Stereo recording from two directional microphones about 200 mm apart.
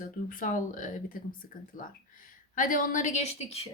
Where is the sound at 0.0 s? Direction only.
40° left (ahead or behind).